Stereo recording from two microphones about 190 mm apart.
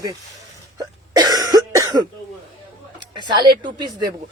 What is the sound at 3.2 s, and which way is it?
Speech, 25° right (ahead or behind).